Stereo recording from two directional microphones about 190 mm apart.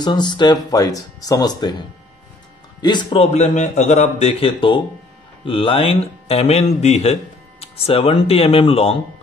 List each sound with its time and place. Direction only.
0.0 s speech: 25° left (ahead or behind)
2.8 s a man's voice: 25° left (ahead or behind)